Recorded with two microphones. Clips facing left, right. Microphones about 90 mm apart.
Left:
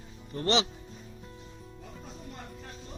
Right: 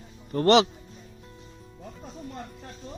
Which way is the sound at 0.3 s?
50° right (ahead or behind).